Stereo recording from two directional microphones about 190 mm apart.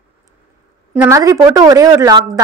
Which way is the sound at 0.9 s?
10° right (ahead or behind).